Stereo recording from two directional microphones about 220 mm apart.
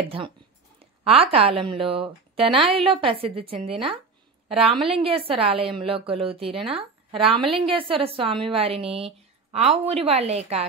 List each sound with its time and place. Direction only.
1.0 s a woman's voice: 25° right (ahead or behind)